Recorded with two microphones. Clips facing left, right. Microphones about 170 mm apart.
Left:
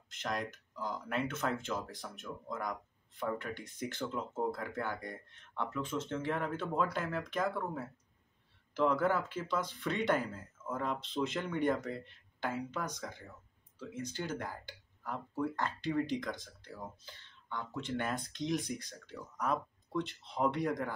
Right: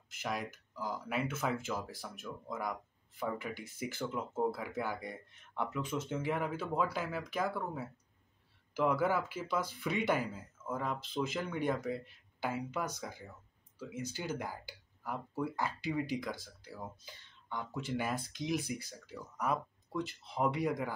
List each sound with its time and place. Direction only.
0.1 s speech: 5° right (ahead or behind)